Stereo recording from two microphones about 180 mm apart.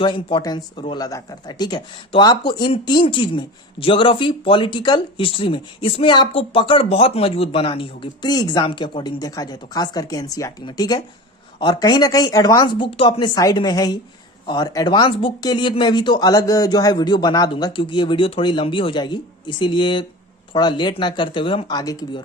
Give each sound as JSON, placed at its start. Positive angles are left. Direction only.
{"t": 0.0, "sound": "speech", "side_deg": 30}